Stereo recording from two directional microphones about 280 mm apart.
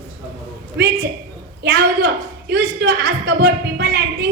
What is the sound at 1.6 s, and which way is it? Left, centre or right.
A woman's voice, right.